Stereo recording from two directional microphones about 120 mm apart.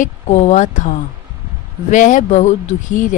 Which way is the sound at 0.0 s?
70° left (ahead or behind).